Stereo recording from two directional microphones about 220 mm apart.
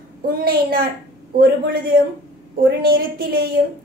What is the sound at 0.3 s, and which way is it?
A woman's voice, 45° right (ahead or behind).